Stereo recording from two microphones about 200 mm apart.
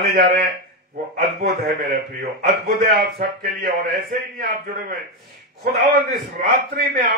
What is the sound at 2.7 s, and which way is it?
A man's voice, 50° right (ahead or behind).